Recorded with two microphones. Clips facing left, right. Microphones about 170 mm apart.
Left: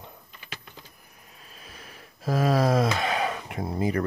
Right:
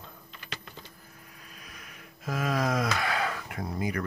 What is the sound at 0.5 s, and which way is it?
Typing, centre (ahead or behind).